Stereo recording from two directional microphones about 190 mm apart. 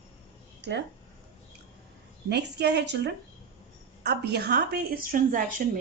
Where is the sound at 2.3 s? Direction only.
65° right (ahead or behind).